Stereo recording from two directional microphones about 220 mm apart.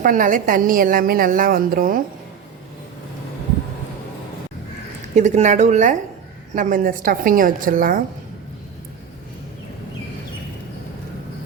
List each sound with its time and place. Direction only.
0.0 s a woman's voice: 35° right (ahead or behind)
5.1 s a woman's voice: 30° right (ahead or behind)